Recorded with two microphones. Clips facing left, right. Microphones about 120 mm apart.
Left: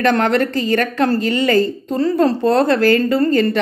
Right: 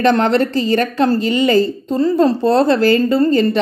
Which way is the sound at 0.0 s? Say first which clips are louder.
Right 2 dB; 25° right (ahead or behind).